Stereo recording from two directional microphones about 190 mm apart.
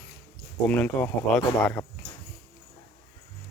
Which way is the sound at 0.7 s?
10° left (ahead or behind).